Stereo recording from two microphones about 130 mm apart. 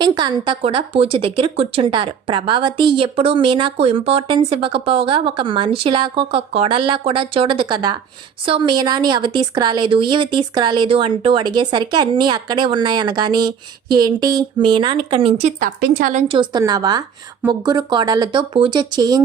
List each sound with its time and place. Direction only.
0.0 s speech: 35° right (ahead or behind)
0.6 s speech: 45° right (ahead or behind)
15.4 s a woman's voice: 75° right (ahead or behind)
16.3 s speech: 35° right (ahead or behind)